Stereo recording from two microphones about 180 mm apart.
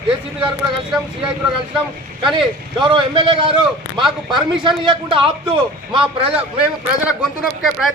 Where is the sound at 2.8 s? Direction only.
30° right (ahead or behind).